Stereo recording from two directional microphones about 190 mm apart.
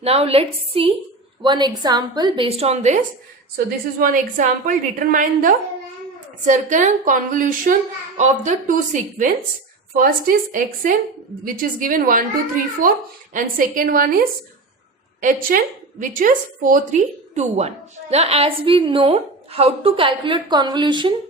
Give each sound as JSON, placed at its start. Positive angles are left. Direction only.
{"t": 0.0, "sound": "a woman's voice", "side_deg": -30}
{"t": 13.3, "sound": "a child's voice", "side_deg": -45}